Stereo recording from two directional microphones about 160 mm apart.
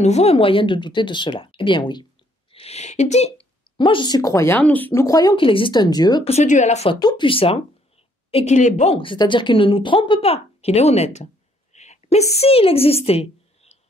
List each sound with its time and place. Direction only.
0.0 s a woman's voice: 40° left (ahead or behind)
2.5 s speech: 40° left (ahead or behind); by 6.2 s 25° left (ahead or behind)
6.2 s speech: 45° left (ahead or behind)
7.0 s a woman's voice: 30° left (ahead or behind); by 8.9 s 50° left (ahead or behind)
8.9 s a woman's voice: 30° left (ahead or behind)
11.7 s a sound: 45° left (ahead or behind)